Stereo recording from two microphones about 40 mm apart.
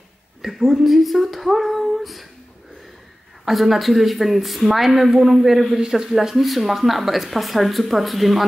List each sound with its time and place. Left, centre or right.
0.4 s speech: centre
3.4 s speech: centre
6.0 s speech: centre